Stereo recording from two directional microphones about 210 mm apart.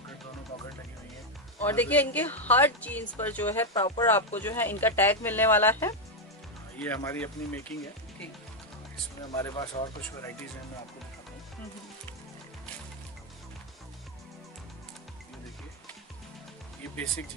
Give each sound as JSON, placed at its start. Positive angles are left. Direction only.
{"t": 1.6, "sound": "speech", "side_deg": 10}
{"t": 9.3, "sound": "speech", "side_deg": 15}